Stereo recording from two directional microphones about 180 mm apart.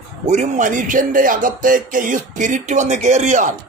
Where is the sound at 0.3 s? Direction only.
40° right (ahead or behind).